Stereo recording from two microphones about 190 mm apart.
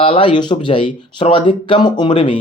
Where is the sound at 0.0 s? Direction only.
30° left (ahead or behind).